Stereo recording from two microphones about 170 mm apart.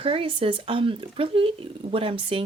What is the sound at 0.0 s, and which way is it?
Speech, 30° right (ahead or behind).